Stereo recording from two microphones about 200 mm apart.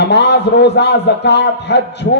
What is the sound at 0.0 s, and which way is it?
A man's voice, 60° left (ahead or behind).